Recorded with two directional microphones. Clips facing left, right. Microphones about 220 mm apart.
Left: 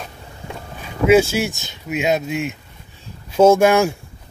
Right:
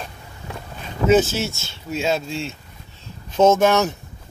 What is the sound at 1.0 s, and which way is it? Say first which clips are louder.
Speech: left 3 dB; 10° left (ahead or behind).